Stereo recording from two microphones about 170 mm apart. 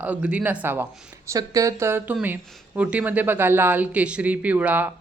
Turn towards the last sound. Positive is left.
turn(degrees=-10)  # may be behind; listen again after turning